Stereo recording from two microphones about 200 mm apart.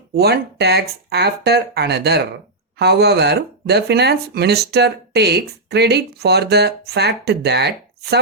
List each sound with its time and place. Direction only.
0.1 s speech: 55° right (ahead or behind)